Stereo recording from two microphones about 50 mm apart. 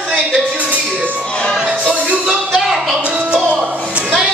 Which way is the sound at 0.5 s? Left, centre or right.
Right.